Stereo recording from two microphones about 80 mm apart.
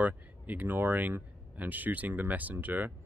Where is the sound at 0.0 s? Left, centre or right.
Right.